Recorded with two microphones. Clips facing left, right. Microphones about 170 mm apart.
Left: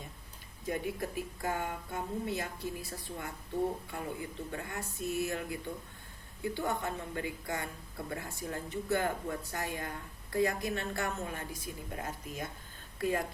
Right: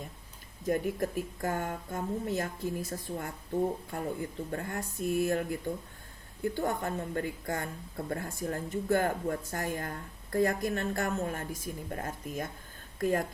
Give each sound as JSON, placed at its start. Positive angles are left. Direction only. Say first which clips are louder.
{"t": 0.7, "sound": "speech", "louder": "right 5 dB", "side_deg": -45}